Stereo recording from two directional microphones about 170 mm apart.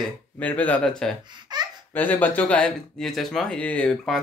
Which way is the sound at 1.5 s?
25° right (ahead or behind).